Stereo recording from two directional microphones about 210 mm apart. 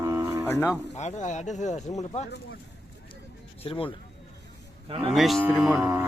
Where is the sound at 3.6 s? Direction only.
25° left (ahead or behind).